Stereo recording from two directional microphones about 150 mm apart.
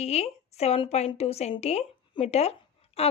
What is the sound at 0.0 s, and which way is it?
A woman's voice, 45° left (ahead or behind).